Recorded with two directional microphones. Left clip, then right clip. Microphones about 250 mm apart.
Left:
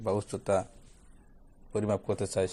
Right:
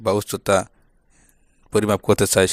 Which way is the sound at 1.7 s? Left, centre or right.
Right.